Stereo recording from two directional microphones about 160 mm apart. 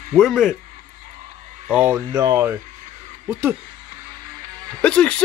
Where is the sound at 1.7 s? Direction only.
10° right (ahead or behind).